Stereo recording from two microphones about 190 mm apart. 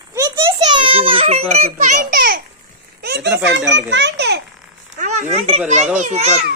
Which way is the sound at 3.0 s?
60° right (ahead or behind).